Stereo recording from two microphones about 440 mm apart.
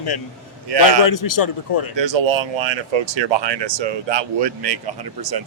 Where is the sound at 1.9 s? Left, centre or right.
Right.